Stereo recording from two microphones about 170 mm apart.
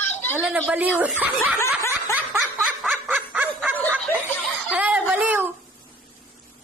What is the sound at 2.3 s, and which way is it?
Snicker, centre (ahead or behind).